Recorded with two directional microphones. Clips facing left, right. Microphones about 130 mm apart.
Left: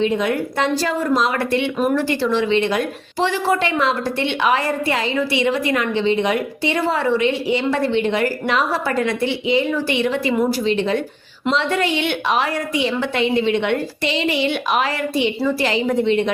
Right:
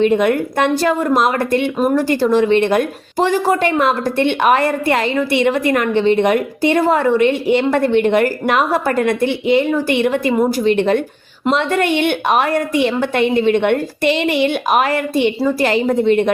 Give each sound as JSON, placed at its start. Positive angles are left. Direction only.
{"t": 0.0, "sound": "a woman's voice", "side_deg": -55}